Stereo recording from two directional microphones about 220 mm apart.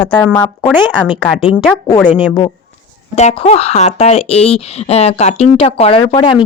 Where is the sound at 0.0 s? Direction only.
5° left (ahead or behind).